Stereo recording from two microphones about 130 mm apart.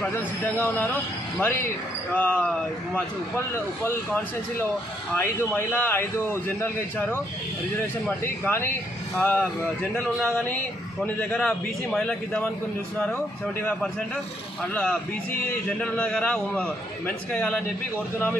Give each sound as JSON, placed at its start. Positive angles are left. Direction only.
{"t": 1.4, "sound": "speech", "side_deg": 15}
{"t": 8.5, "sound": "a man's voice", "side_deg": 15}
{"t": 14.7, "sound": "speech", "side_deg": 10}